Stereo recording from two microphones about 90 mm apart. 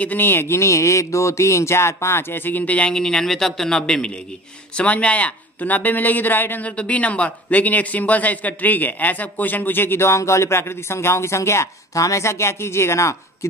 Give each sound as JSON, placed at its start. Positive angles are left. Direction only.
{"t": 0.0, "sound": "speech", "side_deg": 20}